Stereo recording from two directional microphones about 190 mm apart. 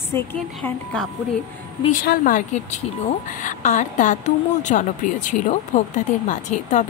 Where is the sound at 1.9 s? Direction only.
45° left (ahead or behind).